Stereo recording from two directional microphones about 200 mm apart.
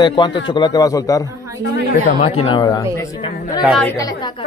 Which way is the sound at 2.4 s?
20° left (ahead or behind).